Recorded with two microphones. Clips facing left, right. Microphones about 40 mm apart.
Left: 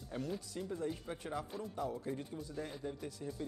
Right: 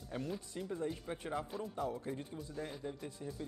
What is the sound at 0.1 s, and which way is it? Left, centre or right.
Speech, centre.